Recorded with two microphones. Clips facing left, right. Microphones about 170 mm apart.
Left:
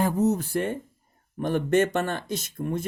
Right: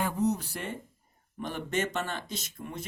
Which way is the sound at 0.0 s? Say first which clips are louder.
Left 6 dB; 45° left (ahead or behind).